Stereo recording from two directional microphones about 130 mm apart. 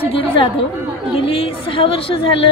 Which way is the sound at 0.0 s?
45° left (ahead or behind).